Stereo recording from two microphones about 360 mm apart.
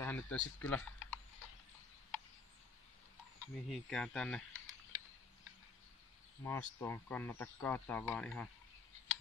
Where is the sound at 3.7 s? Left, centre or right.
Centre.